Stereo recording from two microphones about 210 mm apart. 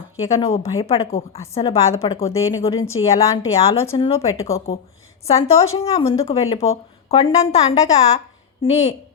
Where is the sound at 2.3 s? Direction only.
15° left (ahead or behind).